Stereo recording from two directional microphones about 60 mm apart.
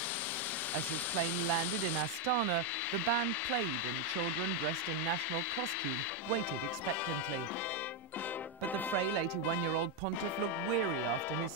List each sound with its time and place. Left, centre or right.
2.9 s speech: left